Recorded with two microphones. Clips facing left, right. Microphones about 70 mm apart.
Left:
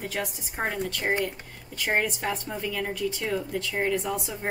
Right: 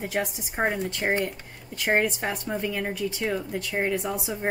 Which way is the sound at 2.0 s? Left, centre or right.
Centre.